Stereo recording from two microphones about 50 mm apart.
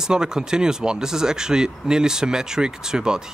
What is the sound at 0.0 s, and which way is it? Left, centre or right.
Speech, centre.